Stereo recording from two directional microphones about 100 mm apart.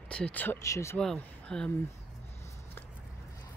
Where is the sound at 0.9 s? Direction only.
10° left (ahead or behind).